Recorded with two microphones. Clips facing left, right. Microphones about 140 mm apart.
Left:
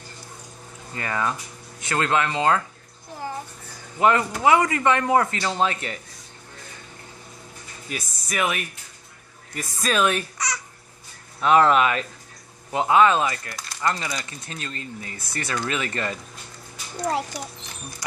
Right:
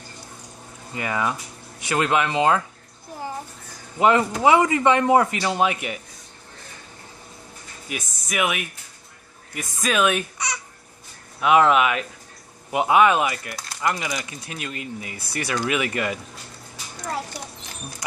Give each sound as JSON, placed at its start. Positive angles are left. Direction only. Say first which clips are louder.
{"t": 0.9, "sound": "speech", "louder": "right 1 dB", "side_deg": -15}
{"t": 4.0, "sound": "speech", "louder": "right 2 dB", "side_deg": -20}
{"t": 7.9, "sound": "speech", "louder": "right 1 dB", "side_deg": -5}
{"t": 11.4, "sound": "speech", "louder": "even", "side_deg": -5}